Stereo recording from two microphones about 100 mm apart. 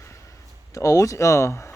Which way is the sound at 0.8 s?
30° left (ahead or behind).